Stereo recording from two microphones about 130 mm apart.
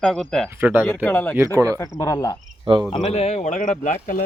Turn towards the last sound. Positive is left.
turn(degrees=80)